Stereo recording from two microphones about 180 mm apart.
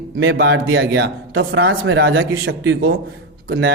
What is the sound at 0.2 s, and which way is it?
A man's voice, 70° right (ahead or behind).